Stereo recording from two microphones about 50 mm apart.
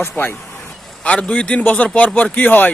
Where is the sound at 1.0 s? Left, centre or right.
Left.